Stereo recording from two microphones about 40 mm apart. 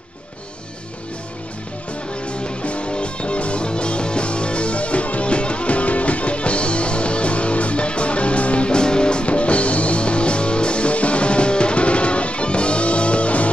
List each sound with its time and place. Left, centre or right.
2.2 s music: left